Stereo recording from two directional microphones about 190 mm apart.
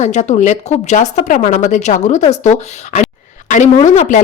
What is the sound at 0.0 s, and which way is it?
A woman's voice, 35° left (ahead or behind).